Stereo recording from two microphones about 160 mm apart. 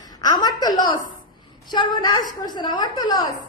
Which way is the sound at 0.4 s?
25° left (ahead or behind).